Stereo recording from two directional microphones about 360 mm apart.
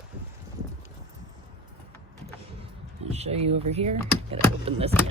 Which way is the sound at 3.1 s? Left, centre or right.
Centre.